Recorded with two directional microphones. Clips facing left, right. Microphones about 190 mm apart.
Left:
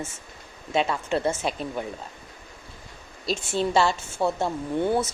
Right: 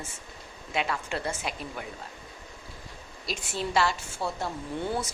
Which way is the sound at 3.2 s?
25° left (ahead or behind).